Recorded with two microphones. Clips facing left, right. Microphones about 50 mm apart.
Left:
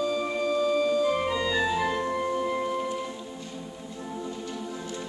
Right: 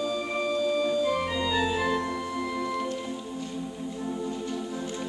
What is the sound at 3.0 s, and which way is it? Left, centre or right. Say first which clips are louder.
Music: right 3 dB; centre.